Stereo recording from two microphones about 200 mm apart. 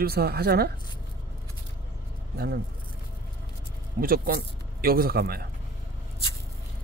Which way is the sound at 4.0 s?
45° right (ahead or behind).